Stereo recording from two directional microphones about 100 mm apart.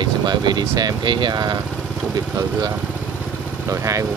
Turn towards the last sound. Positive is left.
turn(degrees=-35)  # may be behind; listen again after turning